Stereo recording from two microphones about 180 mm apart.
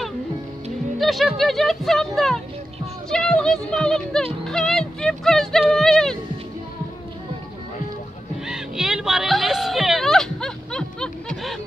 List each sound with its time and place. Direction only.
0.9 s speech: centre (ahead or behind)
8.5 s music: 5° right (ahead or behind)